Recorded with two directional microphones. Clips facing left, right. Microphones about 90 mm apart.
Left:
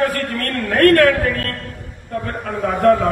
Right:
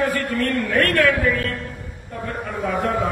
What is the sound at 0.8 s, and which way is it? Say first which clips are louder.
A man's voice: left 9 dB; 50° left (ahead or behind).